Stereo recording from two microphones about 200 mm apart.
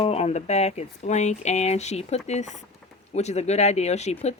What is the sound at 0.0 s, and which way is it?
Speech, 30° left (ahead or behind).